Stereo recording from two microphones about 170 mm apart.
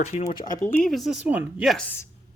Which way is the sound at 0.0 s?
40° left (ahead or behind).